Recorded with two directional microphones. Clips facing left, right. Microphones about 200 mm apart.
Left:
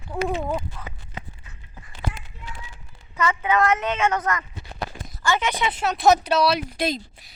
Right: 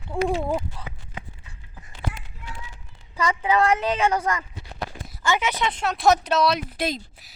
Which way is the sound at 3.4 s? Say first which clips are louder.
Right 1 dB; 30° right (ahead or behind).